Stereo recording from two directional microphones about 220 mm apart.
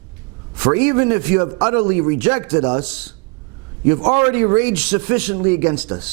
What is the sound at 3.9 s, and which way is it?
A man's voice, 25° right (ahead or behind).